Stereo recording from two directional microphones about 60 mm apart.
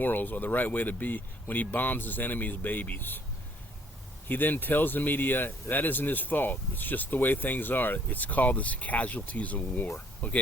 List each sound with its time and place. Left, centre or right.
0.0 s speech: left
4.3 s speech: left